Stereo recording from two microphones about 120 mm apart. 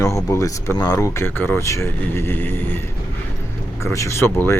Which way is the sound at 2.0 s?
20° left (ahead or behind).